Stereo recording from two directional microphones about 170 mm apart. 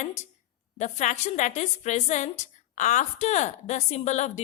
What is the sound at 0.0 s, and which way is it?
Speech, 45° left (ahead or behind).